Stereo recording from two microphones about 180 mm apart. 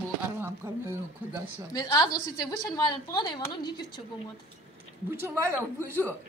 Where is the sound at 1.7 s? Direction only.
25° left (ahead or behind).